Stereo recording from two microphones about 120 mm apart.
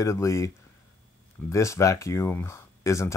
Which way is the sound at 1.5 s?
25° left (ahead or behind).